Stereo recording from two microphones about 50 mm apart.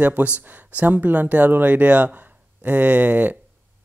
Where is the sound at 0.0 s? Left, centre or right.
Right.